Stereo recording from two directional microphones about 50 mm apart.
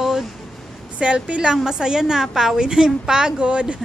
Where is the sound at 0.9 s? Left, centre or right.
Right.